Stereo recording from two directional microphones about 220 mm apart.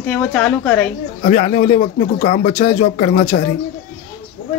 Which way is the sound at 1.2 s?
35° left (ahead or behind).